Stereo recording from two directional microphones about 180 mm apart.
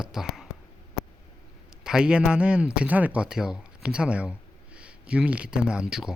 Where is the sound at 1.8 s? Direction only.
5° right (ahead or behind).